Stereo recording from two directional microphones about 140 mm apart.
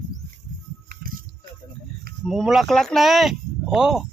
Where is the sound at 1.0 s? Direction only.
85° right.